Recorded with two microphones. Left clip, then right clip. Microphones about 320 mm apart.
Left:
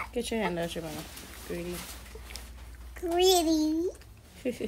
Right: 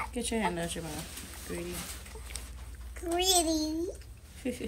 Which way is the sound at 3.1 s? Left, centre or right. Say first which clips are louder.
Left 4 dB; left.